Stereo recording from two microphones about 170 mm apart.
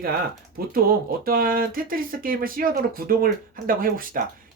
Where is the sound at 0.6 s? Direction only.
60° right (ahead or behind).